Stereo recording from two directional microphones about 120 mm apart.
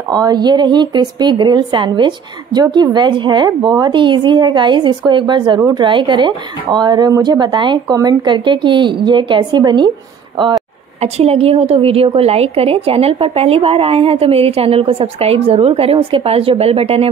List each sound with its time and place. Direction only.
0.1 s a woman's voice: 35° right (ahead or behind)
11.0 s a woman's voice: 60° right (ahead or behind)